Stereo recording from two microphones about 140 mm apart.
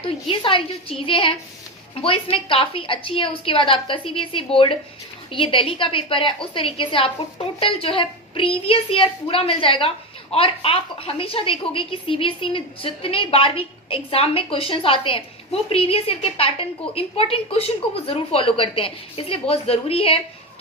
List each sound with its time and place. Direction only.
0.0 s a woman's voice: 40° left (ahead or behind)